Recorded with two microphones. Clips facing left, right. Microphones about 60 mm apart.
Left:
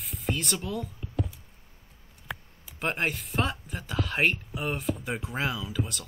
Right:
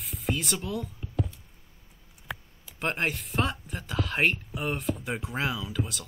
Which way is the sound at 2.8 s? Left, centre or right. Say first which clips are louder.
Even; centre.